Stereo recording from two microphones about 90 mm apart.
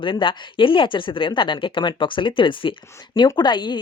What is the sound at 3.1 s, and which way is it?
Speech, 55° left (ahead or behind).